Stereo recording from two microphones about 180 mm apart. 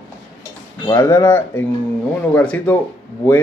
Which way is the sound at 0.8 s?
15° left (ahead or behind).